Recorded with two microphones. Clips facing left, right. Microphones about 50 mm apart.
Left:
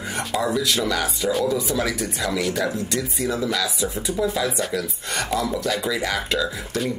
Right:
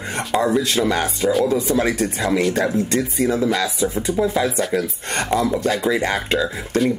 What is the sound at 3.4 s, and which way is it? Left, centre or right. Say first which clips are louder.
Speech: right 4 dB; centre.